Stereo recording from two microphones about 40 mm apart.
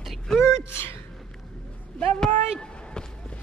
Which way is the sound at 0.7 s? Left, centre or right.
Left.